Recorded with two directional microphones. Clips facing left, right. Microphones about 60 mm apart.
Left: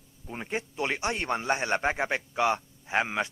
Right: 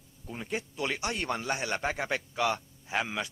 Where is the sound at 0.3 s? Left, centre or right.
Left.